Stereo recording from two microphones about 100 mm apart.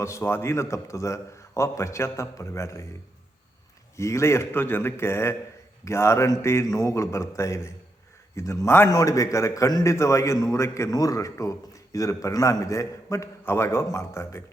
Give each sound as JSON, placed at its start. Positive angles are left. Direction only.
{"t": 0.0, "sound": "a man's voice", "side_deg": 25}
{"t": 3.9, "sound": "a man's voice", "side_deg": 30}